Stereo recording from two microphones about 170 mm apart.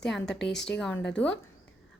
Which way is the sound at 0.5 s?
90° left.